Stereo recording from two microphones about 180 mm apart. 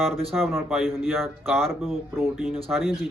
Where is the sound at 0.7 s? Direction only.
Centre (ahead or behind).